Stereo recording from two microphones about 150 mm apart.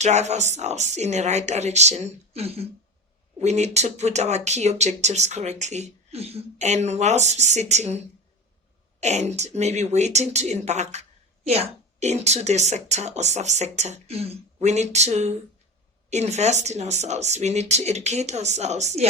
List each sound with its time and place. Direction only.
0.0 s speech: 50° right (ahead or behind)